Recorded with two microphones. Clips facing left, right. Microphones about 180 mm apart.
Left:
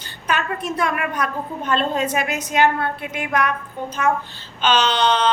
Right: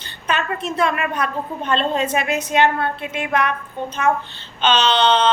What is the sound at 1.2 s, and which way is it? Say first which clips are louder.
A woman's voice: right 1 dB; 10° left (ahead or behind).